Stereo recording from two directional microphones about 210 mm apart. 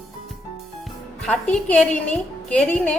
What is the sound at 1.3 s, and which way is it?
A woman's voice, 5° left (ahead or behind).